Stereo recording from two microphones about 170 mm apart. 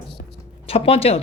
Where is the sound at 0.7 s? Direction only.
35° left (ahead or behind).